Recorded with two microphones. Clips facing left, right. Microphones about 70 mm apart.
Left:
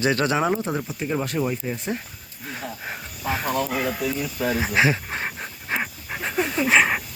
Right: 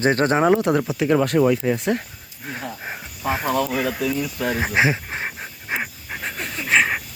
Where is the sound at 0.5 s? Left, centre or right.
Right.